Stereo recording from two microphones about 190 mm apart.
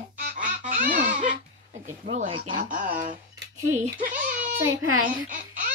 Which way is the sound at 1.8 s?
40° right (ahead or behind).